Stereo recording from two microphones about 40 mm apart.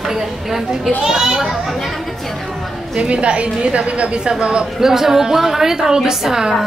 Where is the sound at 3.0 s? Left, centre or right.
Right.